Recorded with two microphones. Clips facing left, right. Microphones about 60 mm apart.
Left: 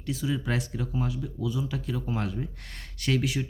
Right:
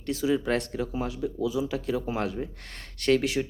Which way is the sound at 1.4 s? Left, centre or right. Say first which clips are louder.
Right 4 dB; right.